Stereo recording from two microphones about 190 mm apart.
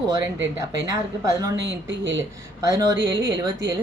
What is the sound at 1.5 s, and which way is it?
Speech, 70° right (ahead or behind).